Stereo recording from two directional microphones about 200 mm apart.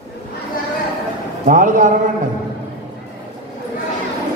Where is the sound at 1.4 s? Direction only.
40° right (ahead or behind).